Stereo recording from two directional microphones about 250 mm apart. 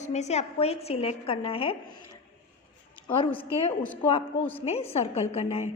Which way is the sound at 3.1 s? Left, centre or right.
Left.